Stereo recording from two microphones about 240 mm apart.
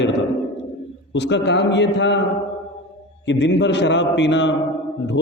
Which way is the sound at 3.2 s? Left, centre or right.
Left.